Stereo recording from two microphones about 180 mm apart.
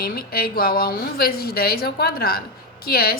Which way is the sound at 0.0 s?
55° left (ahead or behind).